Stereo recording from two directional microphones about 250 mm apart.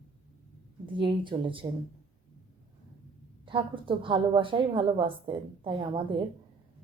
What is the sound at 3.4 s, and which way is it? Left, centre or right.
A woman's voice, centre.